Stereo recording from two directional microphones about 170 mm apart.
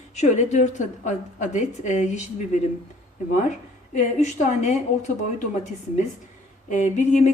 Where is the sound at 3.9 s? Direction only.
45° left (ahead or behind).